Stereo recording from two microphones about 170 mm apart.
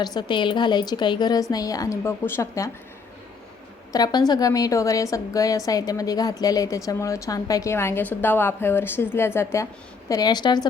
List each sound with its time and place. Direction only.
0.0 s a woman's voice: 25° left (ahead or behind)
3.9 s a woman's voice: 25° left (ahead or behind)